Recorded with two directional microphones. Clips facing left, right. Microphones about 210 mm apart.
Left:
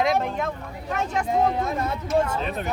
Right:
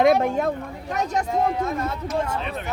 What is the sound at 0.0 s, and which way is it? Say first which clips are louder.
Speech: right 5 dB; 55° right (ahead or behind).